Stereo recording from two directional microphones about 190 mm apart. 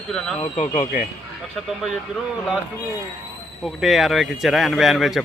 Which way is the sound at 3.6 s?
Centre (ahead or behind).